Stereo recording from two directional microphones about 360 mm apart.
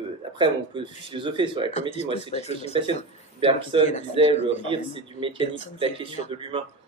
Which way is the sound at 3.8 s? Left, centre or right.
Centre.